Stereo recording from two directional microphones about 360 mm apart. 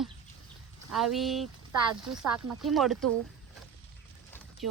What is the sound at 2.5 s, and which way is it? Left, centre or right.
Speech, centre.